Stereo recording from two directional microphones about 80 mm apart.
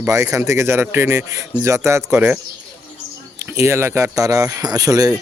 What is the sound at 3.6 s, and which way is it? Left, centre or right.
A man's voice, right.